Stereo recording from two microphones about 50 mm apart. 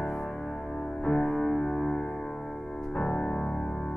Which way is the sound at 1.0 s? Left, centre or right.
Centre.